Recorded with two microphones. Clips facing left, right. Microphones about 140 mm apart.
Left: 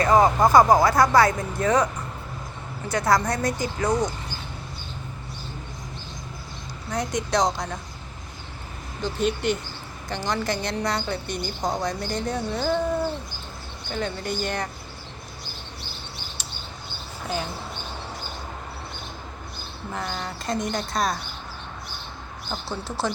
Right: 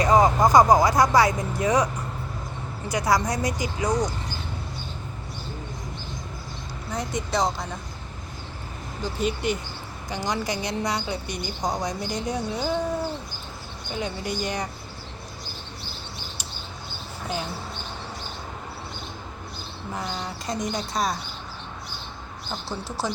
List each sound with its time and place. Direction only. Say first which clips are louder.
0.0 s a woman's voice: even; 20° right (ahead or behind)
2.9 s a woman's voice: left 1 dB; 10° right (ahead or behind)
6.9 s speech: left 3 dB; 5° right (ahead or behind)
9.0 s a woman's voice: left 2 dB; 5° right (ahead or behind)
13.9 s a woman's voice: left 1 dB; 15° right (ahead or behind)
17.2 s speech: left 1 dB; centre (ahead or behind)
19.9 s a woman's voice: even; 10° right (ahead or behind)
22.7 s a woman's voice: even; 10° right (ahead or behind)